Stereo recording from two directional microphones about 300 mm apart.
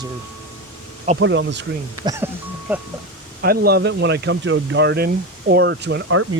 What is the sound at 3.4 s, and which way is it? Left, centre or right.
Speech, right.